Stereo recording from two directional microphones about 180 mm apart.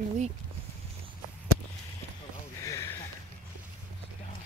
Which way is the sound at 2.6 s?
20° left (ahead or behind).